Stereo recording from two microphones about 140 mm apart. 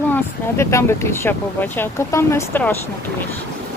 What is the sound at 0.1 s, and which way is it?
Speech, 20° left (ahead or behind).